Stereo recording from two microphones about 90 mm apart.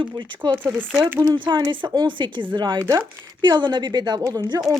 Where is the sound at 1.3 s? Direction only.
55° right (ahead or behind).